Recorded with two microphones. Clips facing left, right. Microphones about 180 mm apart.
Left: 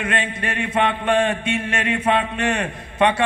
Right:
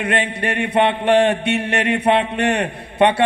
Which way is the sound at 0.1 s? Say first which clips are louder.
Right 4 dB; 65° right (ahead or behind).